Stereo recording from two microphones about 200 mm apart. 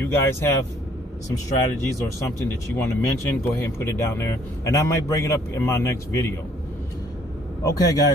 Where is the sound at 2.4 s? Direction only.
10° left (ahead or behind).